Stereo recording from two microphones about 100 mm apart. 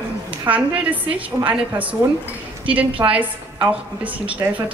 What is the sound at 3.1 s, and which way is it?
Speech, 15° right (ahead or behind).